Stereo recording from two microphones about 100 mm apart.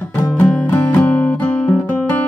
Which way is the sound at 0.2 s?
20° left (ahead or behind).